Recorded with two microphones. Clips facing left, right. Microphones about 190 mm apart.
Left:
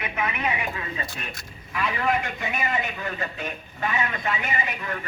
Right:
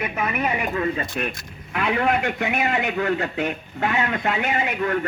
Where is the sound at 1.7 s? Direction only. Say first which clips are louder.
Right 4 dB; 65° right (ahead or behind).